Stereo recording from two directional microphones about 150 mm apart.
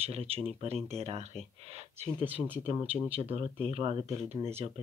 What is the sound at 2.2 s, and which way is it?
Speech, 10° right (ahead or behind).